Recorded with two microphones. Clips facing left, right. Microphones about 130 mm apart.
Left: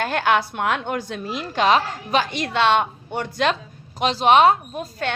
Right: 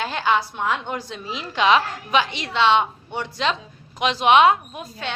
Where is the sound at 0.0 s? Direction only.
55° left (ahead or behind).